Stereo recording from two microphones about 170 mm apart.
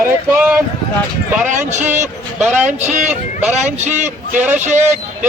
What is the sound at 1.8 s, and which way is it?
Speech, 45° right (ahead or behind).